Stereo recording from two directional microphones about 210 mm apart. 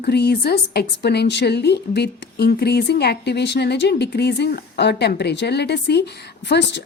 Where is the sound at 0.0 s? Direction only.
50° left (ahead or behind).